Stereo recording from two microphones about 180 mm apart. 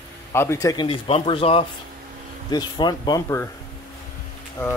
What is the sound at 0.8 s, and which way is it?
Speech, 30° left (ahead or behind).